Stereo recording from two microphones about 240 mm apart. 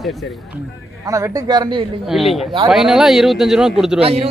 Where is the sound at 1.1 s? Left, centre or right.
Centre.